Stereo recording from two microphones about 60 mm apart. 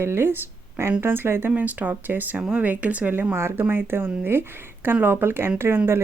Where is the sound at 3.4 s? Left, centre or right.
Right.